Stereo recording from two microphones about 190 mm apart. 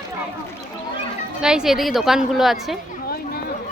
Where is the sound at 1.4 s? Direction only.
5° right (ahead or behind).